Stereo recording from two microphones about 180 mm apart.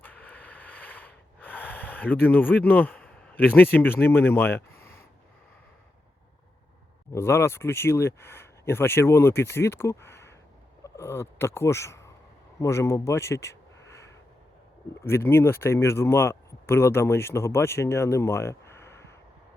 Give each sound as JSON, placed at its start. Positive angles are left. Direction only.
{"t": 0.0, "sound": "snort", "side_deg": 10}
{"t": 7.1, "sound": "speech", "side_deg": 15}
{"t": 12.5, "sound": "a sound", "side_deg": 15}
{"t": 15.0, "sound": "speech", "side_deg": 15}